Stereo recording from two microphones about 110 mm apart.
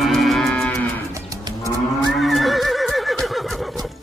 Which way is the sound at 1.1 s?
30° right (ahead or behind).